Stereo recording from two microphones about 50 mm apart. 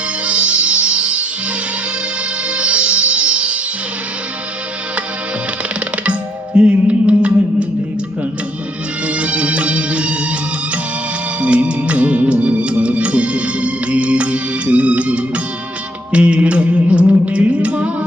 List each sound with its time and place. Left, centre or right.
0.3 s music: right
2.5 s music: right
6.0 s music: right
9.0 s music: right
11.3 s music: right